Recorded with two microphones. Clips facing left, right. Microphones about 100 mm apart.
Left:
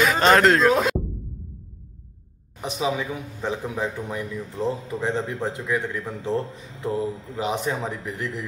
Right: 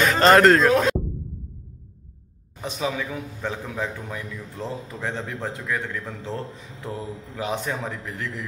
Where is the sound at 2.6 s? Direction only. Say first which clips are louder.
Left 2 dB; 15° left (ahead or behind).